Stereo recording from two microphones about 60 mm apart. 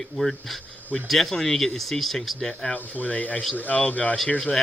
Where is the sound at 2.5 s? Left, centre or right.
Centre.